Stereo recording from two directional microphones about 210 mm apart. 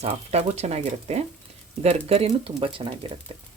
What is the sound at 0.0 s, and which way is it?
Speech, 30° right (ahead or behind).